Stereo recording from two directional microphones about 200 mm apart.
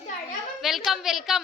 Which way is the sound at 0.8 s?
Centre (ahead or behind).